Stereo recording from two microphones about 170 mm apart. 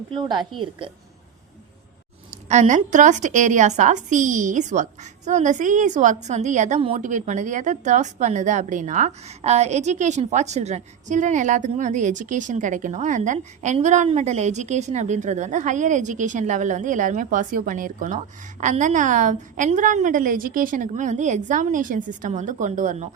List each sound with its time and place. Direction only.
0.1 s a woman's voice: 30° right (ahead or behind)
2.5 s speech: 45° right (ahead or behind)